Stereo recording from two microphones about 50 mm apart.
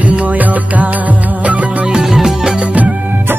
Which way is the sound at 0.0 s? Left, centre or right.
Right.